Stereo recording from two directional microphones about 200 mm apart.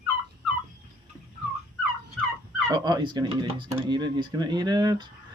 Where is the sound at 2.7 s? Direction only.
20° right (ahead or behind).